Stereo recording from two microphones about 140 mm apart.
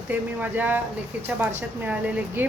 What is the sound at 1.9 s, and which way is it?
Speech, 10° right (ahead or behind).